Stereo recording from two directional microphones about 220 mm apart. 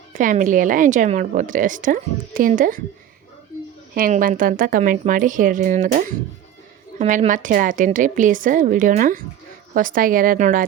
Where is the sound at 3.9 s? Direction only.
40° right (ahead or behind).